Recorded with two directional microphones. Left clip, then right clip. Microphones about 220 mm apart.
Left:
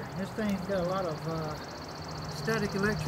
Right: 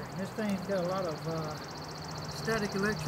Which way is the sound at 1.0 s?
20° right (ahead or behind).